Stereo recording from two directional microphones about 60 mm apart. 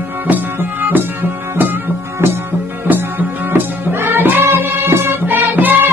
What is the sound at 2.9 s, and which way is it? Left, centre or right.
Music, right.